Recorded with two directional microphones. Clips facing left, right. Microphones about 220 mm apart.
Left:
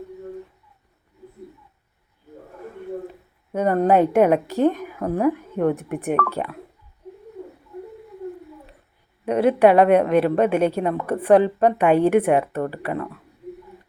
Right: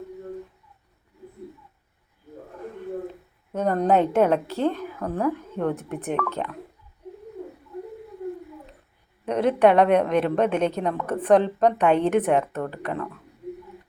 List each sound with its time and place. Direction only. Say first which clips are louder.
3.5 s a woman's voice: left 3 dB; 10° left (ahead or behind)
9.2 s a woman's voice: left 3 dB; 10° left (ahead or behind)